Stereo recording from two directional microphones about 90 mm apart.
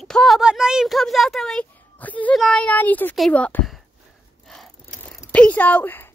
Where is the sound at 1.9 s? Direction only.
15° left (ahead or behind).